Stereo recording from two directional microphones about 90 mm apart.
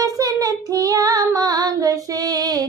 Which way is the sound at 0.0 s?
40° right (ahead or behind).